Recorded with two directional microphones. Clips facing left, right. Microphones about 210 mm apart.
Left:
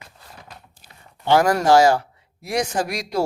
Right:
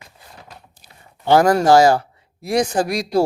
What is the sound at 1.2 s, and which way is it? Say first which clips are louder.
Speech: right 3 dB; 35° right (ahead or behind).